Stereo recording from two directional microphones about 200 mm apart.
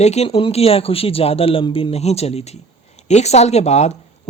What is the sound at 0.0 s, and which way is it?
Speech, 35° left (ahead or behind).